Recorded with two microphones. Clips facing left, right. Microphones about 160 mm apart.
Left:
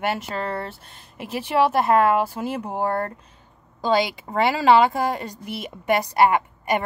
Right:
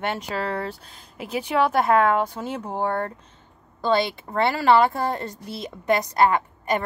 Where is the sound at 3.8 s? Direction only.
15° left (ahead or behind).